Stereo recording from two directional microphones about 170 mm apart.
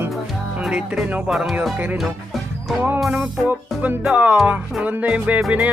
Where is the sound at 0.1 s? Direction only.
5° right (ahead or behind).